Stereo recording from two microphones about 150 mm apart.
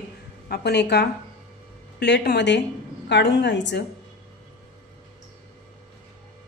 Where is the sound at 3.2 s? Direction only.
90° left.